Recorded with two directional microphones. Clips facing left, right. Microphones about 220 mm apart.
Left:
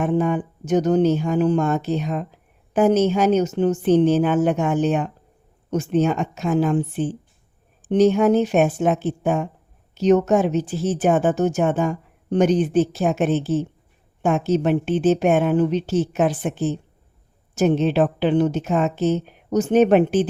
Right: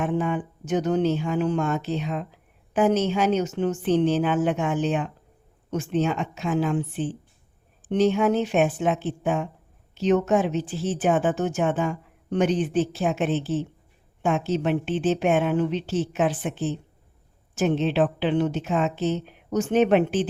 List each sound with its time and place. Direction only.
0.0 s speech: 45° left (ahead or behind)